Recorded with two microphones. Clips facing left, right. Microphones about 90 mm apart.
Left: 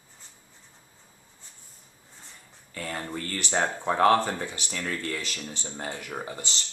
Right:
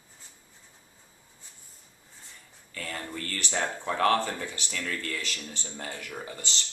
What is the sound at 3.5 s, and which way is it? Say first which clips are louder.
Speech: left 4 dB; 30° left (ahead or behind).